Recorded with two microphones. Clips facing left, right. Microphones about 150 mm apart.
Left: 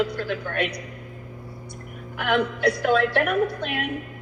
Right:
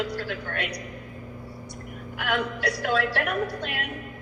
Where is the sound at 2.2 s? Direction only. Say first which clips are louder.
Left 5 dB; 50° left (ahead or behind).